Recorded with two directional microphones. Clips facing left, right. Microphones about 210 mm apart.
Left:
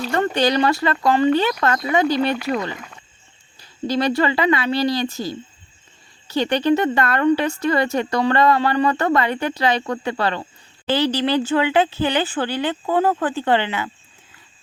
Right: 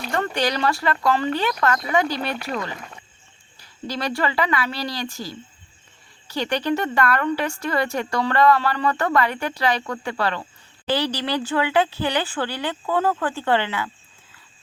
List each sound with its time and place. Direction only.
0.2 s speech: 25° left (ahead or behind)
3.6 s speech: 20° left (ahead or behind)